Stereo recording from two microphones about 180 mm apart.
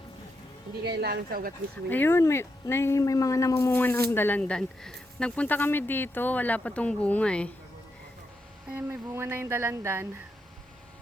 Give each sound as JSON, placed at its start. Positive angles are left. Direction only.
{"t": 0.9, "sound": "speech", "side_deg": -65}
{"t": 1.9, "sound": "speech", "side_deg": 10}
{"t": 8.7, "sound": "speech", "side_deg": -15}